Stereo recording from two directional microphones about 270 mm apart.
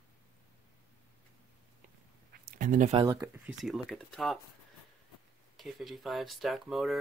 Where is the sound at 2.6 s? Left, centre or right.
Right.